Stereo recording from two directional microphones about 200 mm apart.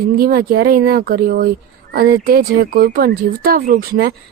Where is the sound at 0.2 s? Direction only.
45° right (ahead or behind).